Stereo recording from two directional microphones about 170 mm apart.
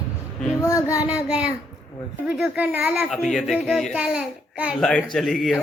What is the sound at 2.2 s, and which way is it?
A man's voice, 5° right (ahead or behind).